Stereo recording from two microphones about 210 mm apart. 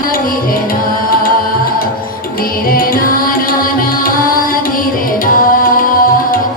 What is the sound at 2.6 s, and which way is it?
Music, 45° left (ahead or behind).